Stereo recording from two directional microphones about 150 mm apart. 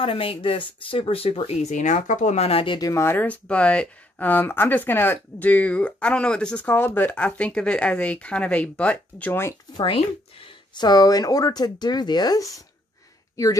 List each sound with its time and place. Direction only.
0.0 s speech: 35° left (ahead or behind)
2.9 s speech: 15° left (ahead or behind)
9.8 s speech: 35° left (ahead or behind)